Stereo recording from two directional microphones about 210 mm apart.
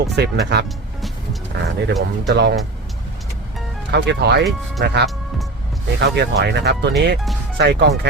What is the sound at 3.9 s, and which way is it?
Speech, 55° right (ahead or behind).